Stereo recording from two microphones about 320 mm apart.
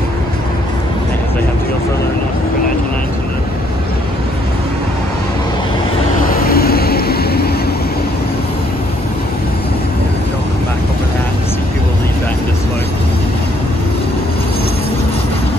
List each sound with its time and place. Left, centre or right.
6.3 s vehicle: left